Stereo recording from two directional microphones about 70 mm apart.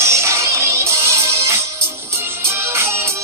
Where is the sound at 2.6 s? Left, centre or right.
Right.